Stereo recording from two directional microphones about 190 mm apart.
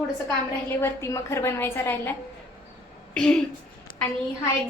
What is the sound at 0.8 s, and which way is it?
A woman's voice, 15° left (ahead or behind).